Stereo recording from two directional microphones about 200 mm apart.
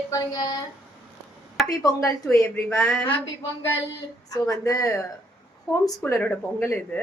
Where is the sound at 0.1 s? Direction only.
20° left (ahead or behind).